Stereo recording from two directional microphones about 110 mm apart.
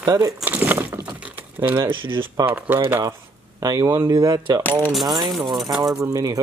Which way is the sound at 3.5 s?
35° right (ahead or behind).